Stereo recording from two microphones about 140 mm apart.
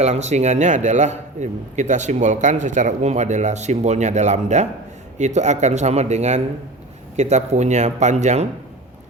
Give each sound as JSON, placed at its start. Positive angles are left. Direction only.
{"t": 0.0, "sound": "a man's voice", "side_deg": -55}